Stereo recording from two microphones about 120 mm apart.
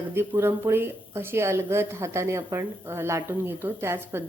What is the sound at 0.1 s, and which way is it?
Speech, 20° right (ahead or behind).